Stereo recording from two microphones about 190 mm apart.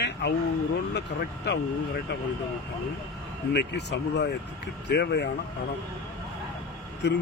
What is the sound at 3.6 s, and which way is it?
Speech, 65° left (ahead or behind).